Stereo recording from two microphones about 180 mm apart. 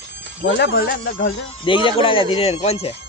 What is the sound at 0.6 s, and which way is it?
Speech, 75° left (ahead or behind).